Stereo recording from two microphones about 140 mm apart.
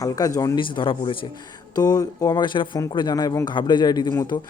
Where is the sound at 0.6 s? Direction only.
35° left (ahead or behind).